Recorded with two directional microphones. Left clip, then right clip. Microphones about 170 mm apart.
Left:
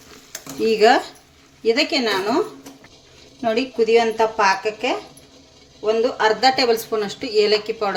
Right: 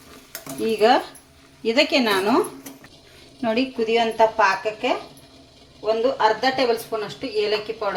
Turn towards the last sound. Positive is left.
turn(degrees=50)  # may be behind; listen again after turning